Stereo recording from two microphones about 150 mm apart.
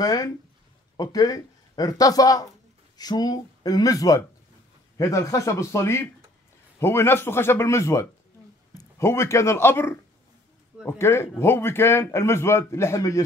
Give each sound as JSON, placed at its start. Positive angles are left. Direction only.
{"t": 0.0, "sound": "a man's voice", "side_deg": 25}